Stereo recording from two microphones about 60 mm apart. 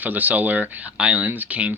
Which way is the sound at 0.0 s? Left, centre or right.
Right.